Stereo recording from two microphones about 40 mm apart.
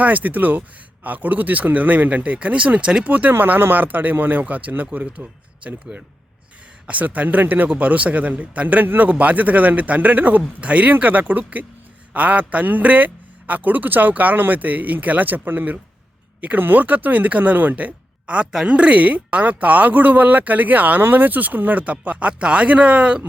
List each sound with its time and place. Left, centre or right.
0.0 s speech: right
3.3 s speech: right
7.7 s speech: right
16.4 s speech: right